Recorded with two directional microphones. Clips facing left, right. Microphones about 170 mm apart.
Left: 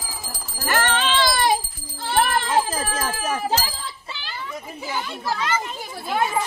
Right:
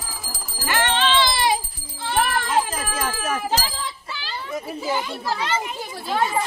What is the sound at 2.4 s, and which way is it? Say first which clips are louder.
Bicycle bell: left 1 dB; 35° left (ahead or behind).